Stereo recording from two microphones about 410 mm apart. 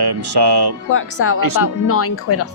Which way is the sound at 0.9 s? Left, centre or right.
Left.